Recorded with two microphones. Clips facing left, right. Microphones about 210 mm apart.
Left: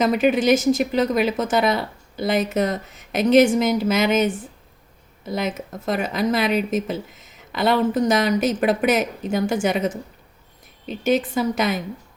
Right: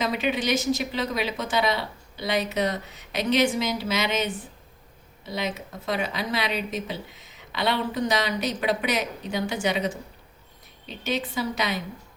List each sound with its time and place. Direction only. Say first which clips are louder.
0.0 s speech: left 8 dB; 45° left (ahead or behind)